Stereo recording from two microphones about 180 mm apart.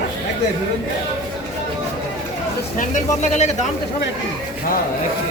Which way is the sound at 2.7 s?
40° left (ahead or behind).